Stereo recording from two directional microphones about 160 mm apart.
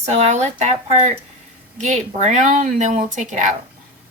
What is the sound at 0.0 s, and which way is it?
Speech, 45° right (ahead or behind).